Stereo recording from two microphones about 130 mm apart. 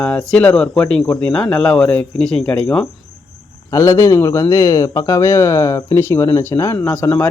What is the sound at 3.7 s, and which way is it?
Speech, 25° left (ahead or behind).